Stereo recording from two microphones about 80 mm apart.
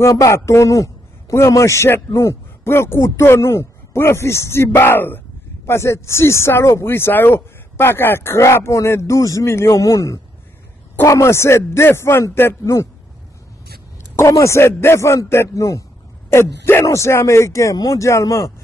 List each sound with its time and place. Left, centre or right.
0.0 s speech: left
14.1 s speech: left
15.5 s speech: left
16.3 s speech: left